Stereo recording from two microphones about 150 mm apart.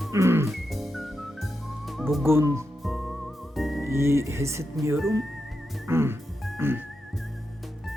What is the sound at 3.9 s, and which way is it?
Speech, 15° right (ahead or behind).